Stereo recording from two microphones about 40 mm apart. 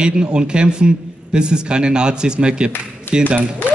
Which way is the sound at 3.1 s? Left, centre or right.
Left.